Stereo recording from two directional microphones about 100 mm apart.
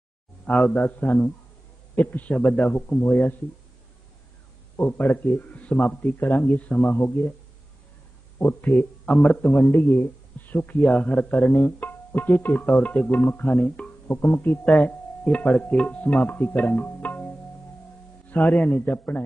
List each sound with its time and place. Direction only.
0.5 s a man's voice: 10° left (ahead or behind)
4.7 s a man's voice: 20° left (ahead or behind)
8.4 s a man's voice: 20° left (ahead or behind)
14.0 s speech: 20° left (ahead or behind)
18.3 s a man's voice: 15° left (ahead or behind)